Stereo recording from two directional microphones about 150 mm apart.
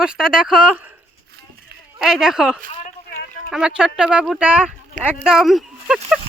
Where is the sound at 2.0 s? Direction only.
5° right (ahead or behind).